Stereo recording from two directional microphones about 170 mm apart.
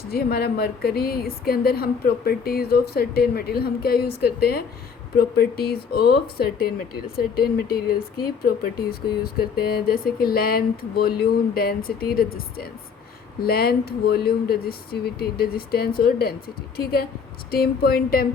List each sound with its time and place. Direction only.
0.1 s speech: 65° left (ahead or behind)